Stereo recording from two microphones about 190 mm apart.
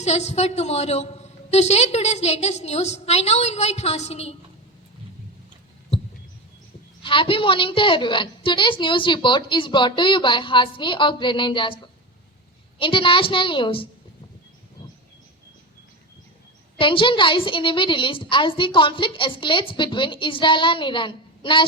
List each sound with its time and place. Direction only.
0.0 s a woman's voice: 35° left (ahead or behind)
7.0 s a woman's voice: 25° left (ahead or behind)
16.7 s a woman's voice: 25° left (ahead or behind)